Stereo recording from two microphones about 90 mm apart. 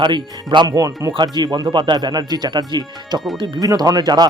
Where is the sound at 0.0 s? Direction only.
60° right (ahead or behind).